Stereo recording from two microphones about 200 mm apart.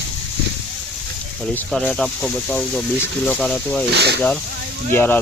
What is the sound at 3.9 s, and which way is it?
Speech, 55° right (ahead or behind).